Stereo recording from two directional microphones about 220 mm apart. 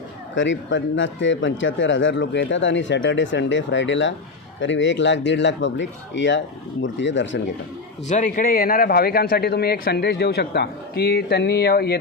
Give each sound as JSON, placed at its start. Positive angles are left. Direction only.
{"t": 0.3, "sound": "speech", "side_deg": 55}
{"t": 8.0, "sound": "speech", "side_deg": 35}